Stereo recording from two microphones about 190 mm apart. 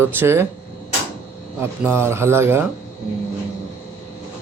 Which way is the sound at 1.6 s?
10° right (ahead or behind).